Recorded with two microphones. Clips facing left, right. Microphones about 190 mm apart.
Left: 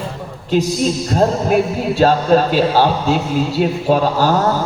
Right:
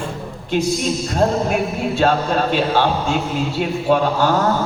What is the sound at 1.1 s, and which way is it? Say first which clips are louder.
A man's voice: left 2 dB; 35° left (ahead or behind).